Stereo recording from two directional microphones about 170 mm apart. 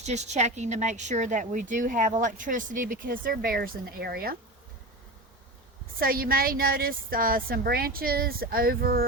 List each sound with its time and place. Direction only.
0.0 s speech: 40° right (ahead or behind); by 4.4 s 65° right (ahead or behind)
6.0 s a woman's voice: 60° right (ahead or behind)